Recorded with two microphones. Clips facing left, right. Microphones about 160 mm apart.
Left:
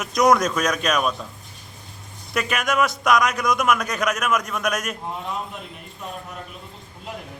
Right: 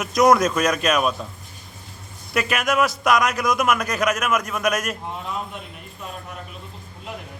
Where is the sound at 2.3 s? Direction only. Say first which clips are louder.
Right 1 dB; centre (ahead or behind).